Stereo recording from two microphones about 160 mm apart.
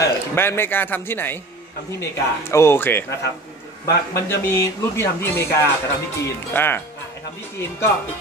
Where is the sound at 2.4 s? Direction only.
15° left (ahead or behind).